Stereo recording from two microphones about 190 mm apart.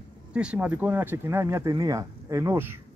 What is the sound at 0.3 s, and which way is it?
Speech, 5° right (ahead or behind).